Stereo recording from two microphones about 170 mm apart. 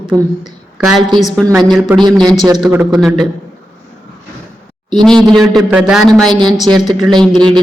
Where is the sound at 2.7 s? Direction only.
10° right (ahead or behind).